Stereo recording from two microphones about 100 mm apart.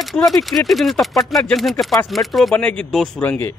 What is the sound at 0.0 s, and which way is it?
Bell, centre (ahead or behind).